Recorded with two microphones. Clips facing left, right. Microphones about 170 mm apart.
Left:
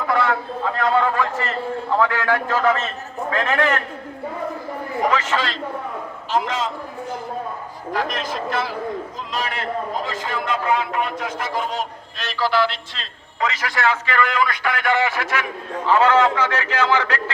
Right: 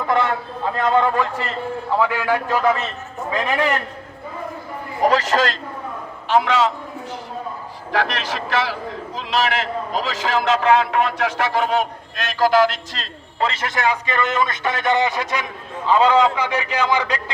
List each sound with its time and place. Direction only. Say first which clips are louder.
0.1 s a sound: right 1 dB; 20° right (ahead or behind)
0.8 s a man's voice: right 2 dB; 20° right (ahead or behind)
5.0 s a man's voice: right 5 dB; 35° right (ahead or behind)
6.2 s a man's voice: right 6 dB; 65° right (ahead or behind)
7.9 s a man's voice: right 2 dB; 75° right (ahead or behind); by 17.3 s 15° right (ahead or behind)